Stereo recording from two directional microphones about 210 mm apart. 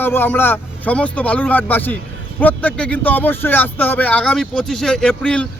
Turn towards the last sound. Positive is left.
turn(degrees=5)  # may be behind; listen again after turning